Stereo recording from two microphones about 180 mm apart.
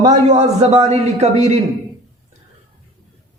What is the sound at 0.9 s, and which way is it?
Speech, 40° right (ahead or behind).